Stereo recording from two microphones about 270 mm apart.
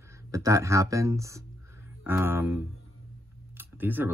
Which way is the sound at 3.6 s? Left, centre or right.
Centre.